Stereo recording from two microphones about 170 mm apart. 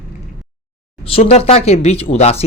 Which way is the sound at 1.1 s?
40° left (ahead or behind).